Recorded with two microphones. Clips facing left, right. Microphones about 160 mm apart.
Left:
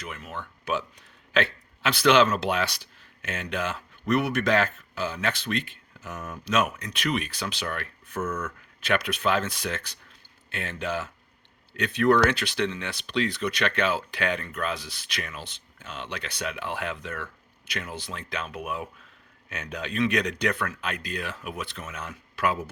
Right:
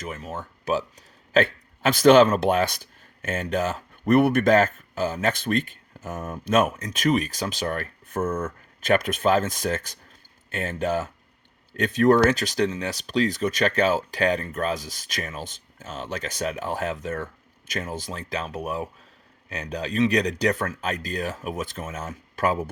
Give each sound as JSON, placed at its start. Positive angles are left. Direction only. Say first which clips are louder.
{"t": 0.0, "sound": "speech", "louder": "right 4 dB", "side_deg": -40}
{"t": 8.2, "sound": "speech", "louder": "right 4 dB", "side_deg": -30}
{"t": 8.8, "sound": "speech", "louder": "right 5 dB", "side_deg": -45}